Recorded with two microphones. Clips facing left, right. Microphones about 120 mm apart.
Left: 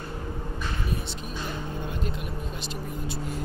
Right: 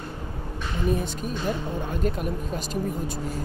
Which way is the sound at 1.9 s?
45° right (ahead or behind).